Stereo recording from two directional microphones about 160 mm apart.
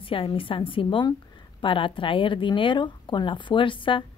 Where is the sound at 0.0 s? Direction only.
35° left (ahead or behind).